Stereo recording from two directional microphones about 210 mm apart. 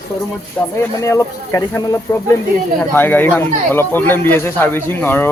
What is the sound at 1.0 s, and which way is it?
Speech, 15° left (ahead or behind).